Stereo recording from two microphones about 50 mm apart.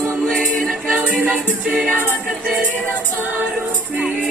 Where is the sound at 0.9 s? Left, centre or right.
Right.